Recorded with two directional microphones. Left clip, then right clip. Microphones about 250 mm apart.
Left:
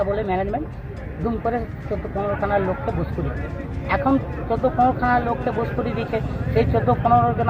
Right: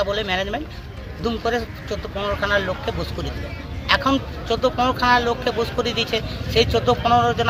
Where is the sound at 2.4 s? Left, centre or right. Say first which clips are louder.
Right 2 dB; right.